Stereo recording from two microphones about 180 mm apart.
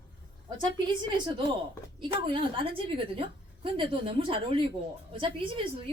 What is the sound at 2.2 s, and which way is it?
A woman's voice, 30° right (ahead or behind).